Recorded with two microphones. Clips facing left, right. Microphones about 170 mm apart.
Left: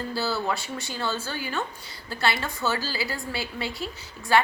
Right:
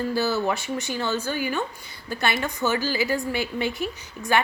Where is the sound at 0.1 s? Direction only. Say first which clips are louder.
Right 2 dB; 20° right (ahead or behind).